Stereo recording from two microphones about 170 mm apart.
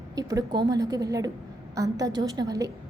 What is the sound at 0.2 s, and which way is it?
A woman's voice, 20° right (ahead or behind).